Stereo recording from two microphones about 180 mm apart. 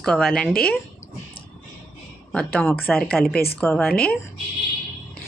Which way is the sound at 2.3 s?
5° left (ahead or behind).